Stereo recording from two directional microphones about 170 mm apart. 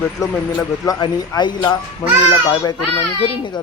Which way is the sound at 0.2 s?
20° left (ahead or behind).